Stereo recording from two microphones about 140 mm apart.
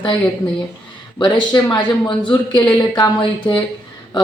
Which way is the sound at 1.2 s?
30° left (ahead or behind).